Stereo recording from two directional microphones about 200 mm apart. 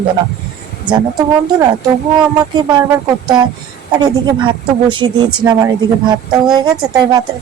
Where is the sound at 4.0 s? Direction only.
20° right (ahead or behind).